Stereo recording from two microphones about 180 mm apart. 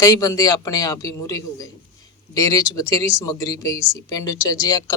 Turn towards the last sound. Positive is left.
turn(degrees=20)  # may be behind; listen again after turning